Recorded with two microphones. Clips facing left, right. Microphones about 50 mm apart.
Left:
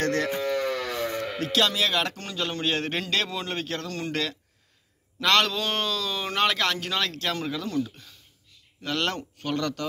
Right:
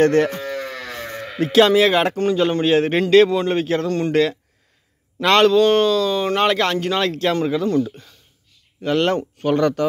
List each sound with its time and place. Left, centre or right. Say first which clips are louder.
0.0 s speech: right 11 dB; right
1.4 s speech: right 12 dB; right
2.1 s a man's voice: right 13 dB; centre
5.6 s a man's voice: right 13 dB; centre; by 9.8 s right